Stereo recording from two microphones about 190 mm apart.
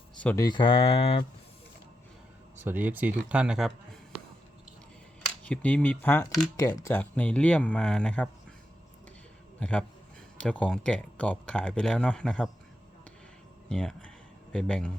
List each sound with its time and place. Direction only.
0.2 s speech: 10° left (ahead or behind)
0.4 s speech: 25° left (ahead or behind)
2.6 s speech: 10° right (ahead or behind)
5.4 s speech: 5° left (ahead or behind)
9.6 s a man's voice: 5° left (ahead or behind)
13.7 s speech: 5° left (ahead or behind)